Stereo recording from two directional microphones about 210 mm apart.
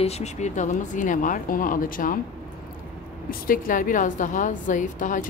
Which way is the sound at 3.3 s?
40° left (ahead or behind).